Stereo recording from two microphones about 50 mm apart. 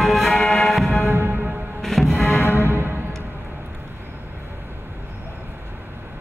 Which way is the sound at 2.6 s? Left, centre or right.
Right.